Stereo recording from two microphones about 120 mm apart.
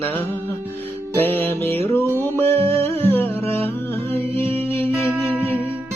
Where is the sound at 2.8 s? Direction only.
55° right (ahead or behind).